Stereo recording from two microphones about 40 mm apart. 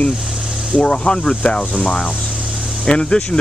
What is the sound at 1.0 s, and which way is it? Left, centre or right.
Speech, left.